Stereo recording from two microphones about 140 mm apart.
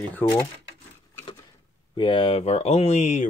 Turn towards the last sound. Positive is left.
turn(degrees=55)  # may be behind; listen again after turning